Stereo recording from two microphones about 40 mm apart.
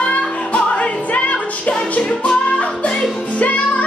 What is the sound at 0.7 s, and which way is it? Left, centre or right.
Music, left.